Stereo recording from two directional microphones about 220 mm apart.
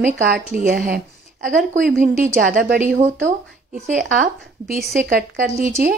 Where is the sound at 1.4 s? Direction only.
35° right (ahead or behind).